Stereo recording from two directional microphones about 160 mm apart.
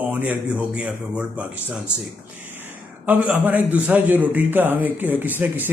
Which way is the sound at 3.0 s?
10° right (ahead or behind).